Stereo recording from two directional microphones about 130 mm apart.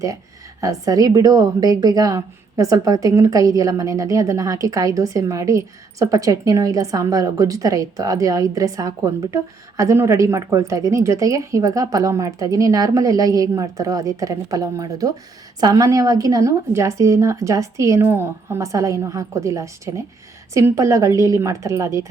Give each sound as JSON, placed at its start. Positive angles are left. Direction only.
{"t": 0.6, "sound": "a woman's voice", "side_deg": -25}